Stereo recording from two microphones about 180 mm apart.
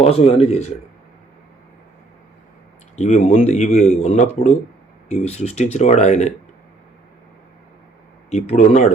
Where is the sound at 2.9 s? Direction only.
40° left (ahead or behind).